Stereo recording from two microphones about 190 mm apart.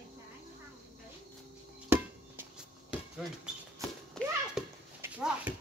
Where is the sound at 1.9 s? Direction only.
10° right (ahead or behind).